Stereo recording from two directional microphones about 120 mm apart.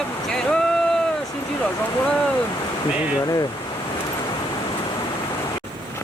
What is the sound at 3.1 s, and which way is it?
Speech, 30° left (ahead or behind).